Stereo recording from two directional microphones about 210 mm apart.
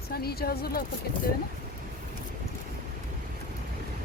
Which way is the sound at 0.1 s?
50° left (ahead or behind).